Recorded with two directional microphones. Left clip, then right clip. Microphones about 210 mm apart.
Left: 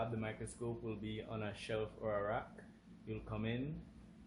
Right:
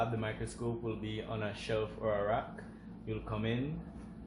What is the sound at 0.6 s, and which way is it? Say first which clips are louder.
Speech: right 5 dB; 30° left (ahead or behind).